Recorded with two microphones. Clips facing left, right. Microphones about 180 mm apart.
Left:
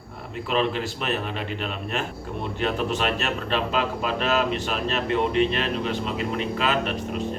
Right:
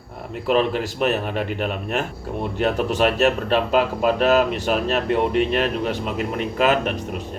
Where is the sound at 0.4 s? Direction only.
45° right (ahead or behind).